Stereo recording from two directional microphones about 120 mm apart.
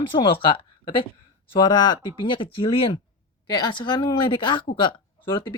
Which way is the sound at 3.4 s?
35° left (ahead or behind).